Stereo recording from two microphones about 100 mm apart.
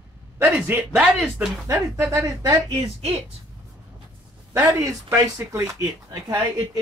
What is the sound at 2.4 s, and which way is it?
Speech, 45° right (ahead or behind).